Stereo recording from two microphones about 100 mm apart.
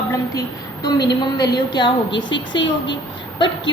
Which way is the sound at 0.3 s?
45° left (ahead or behind).